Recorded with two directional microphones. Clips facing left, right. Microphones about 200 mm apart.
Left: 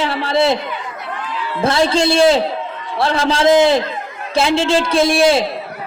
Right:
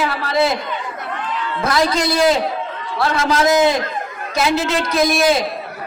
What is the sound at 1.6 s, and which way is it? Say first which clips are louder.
A woman's voice: left 3 dB; 30° left (ahead or behind).